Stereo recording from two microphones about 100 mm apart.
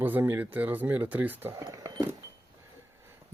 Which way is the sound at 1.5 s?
30° right (ahead or behind).